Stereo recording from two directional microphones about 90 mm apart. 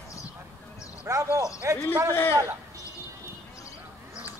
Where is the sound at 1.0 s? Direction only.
30° right (ahead or behind).